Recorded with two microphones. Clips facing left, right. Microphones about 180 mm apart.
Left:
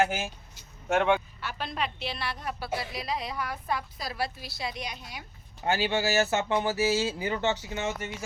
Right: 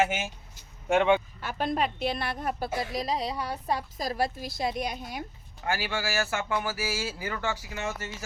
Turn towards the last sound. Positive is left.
turn(degrees=25)  # may be behind; listen again after turning